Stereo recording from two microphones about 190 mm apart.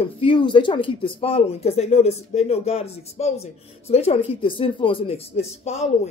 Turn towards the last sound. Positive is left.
turn(degrees=35)  # may be behind; listen again after turning